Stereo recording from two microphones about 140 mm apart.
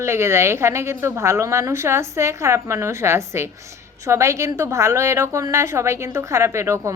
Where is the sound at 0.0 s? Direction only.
20° right (ahead or behind).